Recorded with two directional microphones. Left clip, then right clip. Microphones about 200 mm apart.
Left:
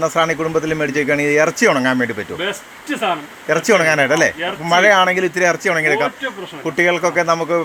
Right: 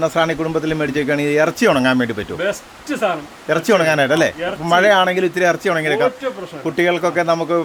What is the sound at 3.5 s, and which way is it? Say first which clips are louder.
Speech: left 1 dB; 10° right (ahead or behind).